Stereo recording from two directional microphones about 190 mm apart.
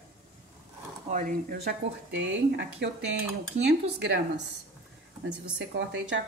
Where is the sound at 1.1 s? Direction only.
50° right (ahead or behind); by 4.2 s 65° right (ahead or behind).